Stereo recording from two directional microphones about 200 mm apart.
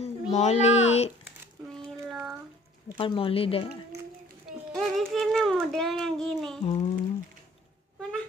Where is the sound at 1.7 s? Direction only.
5° right (ahead or behind).